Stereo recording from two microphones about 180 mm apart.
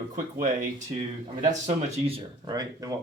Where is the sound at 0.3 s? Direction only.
45° right (ahead or behind).